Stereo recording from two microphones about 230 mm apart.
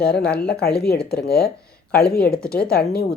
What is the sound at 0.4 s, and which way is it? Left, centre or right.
Speech, left.